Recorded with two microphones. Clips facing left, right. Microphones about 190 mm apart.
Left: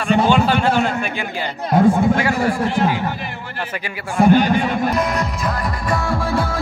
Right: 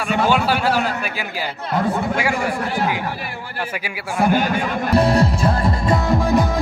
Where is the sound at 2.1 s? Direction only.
10° right (ahead or behind).